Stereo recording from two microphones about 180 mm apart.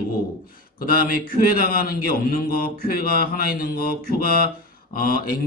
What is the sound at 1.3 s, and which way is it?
Mantra, 55° left (ahead or behind).